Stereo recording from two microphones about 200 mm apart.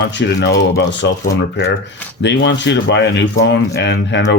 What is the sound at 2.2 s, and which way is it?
Speech, 60° left (ahead or behind).